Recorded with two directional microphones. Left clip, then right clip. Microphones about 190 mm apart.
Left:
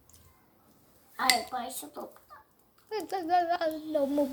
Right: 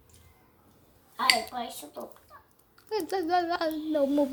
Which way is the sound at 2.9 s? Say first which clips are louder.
Right 1 dB; 10° right (ahead or behind).